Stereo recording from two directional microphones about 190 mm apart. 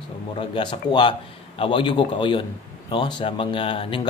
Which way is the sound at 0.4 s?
25° left (ahead or behind).